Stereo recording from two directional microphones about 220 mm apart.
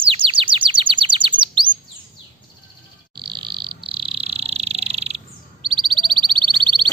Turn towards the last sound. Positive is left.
turn(degrees=-20)  # may be behind; listen again after turning